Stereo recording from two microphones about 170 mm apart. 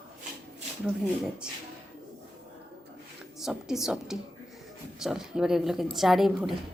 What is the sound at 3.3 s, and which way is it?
A woman's voice, centre (ahead or behind).